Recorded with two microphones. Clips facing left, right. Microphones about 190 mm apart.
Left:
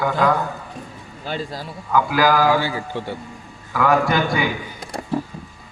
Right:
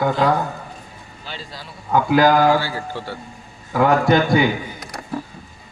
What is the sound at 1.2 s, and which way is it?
Speech, 50° left (ahead or behind).